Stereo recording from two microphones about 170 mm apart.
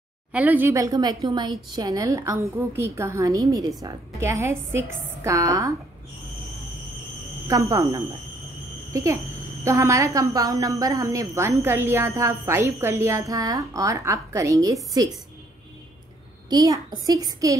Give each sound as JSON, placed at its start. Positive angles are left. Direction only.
{"t": 0.3, "sound": "speech", "side_deg": -10}
{"t": 7.4, "sound": "a woman's voice", "side_deg": -20}
{"t": 16.4, "sound": "speech", "side_deg": -20}